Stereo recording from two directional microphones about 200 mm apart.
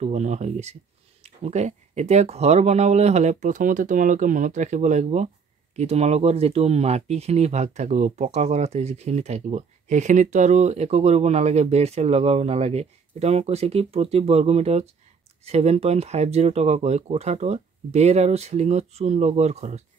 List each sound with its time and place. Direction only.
0.0 s speech: 35° right (ahead or behind)